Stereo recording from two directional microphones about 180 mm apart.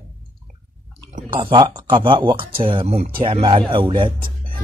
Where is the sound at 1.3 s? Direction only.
25° right (ahead or behind).